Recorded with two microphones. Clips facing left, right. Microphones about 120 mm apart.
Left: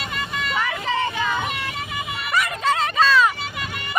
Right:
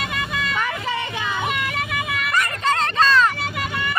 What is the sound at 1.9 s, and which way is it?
Music, 80° right.